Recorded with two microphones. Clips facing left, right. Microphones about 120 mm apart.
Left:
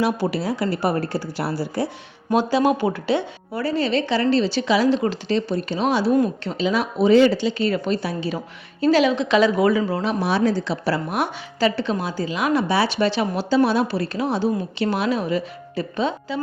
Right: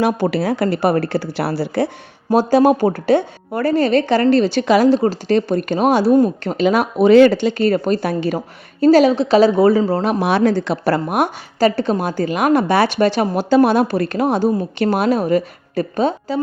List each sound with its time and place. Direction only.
0.0 s speech: 60° right (ahead or behind)
2.3 s a woman's voice: 40° right (ahead or behind)
8.4 s a woman's voice: 40° right (ahead or behind)
10.1 s a woman's voice: 65° right (ahead or behind); by 16.4 s 45° right (ahead or behind)